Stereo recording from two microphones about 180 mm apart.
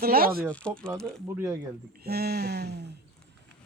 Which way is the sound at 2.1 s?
60° right (ahead or behind).